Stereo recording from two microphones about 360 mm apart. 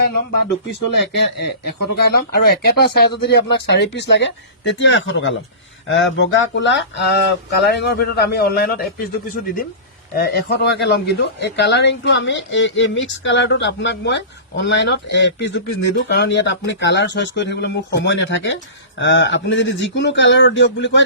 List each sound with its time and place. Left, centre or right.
0.3 s speech: left
1.6 s speech: left
10.2 s speech: left